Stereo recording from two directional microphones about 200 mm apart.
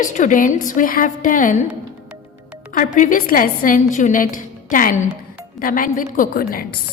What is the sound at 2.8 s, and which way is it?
A woman's voice, 40° left (ahead or behind).